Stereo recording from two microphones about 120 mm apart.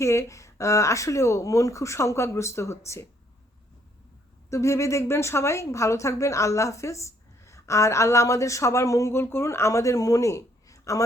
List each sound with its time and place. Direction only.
0.0 s speech: 25° left (ahead or behind)
4.4 s speech: 25° left (ahead or behind)